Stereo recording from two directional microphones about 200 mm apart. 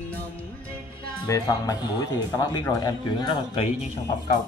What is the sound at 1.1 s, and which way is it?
Speech, 15° left (ahead or behind).